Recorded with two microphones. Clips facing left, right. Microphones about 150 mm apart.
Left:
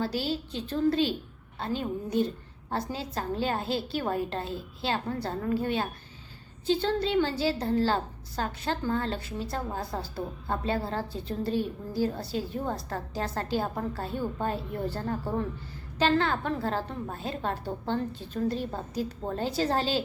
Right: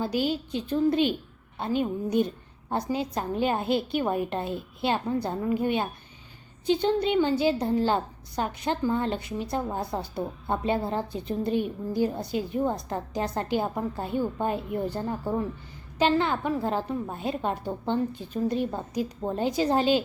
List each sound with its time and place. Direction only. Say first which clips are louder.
0.3 s a woman's voice: right 3 dB; 15° right (ahead or behind)